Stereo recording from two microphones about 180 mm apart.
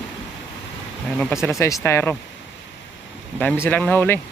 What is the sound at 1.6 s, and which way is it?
Speech, 15° left (ahead or behind).